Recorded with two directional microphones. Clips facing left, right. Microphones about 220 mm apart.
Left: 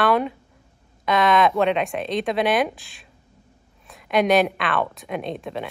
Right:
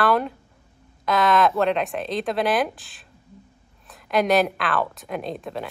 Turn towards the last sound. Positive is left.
turn(degrees=0)  # may be behind; listen again after turning